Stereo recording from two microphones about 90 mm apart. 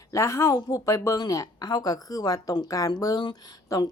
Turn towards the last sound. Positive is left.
turn(degrees=45)  # may be behind; listen again after turning